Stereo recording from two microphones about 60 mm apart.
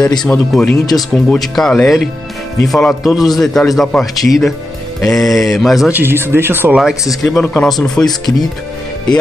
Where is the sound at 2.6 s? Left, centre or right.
Centre.